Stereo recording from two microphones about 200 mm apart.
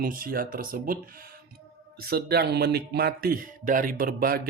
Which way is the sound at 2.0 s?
50° right (ahead or behind).